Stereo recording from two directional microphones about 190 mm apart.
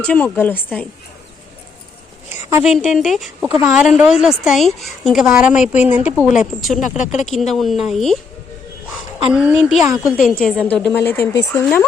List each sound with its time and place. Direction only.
0.0 s speech: 10° left (ahead or behind)
2.6 s speech: centre (ahead or behind)
6.8 s speech: 40° left (ahead or behind)
7.3 s speech: centre (ahead or behind)
9.3 s speech: 5° right (ahead or behind); by 11.9 s 15° left (ahead or behind)